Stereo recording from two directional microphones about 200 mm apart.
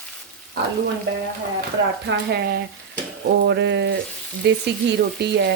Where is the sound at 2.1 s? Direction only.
55° right (ahead or behind).